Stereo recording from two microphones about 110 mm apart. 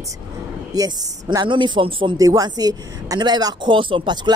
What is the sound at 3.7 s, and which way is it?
Speech, 50° right (ahead or behind).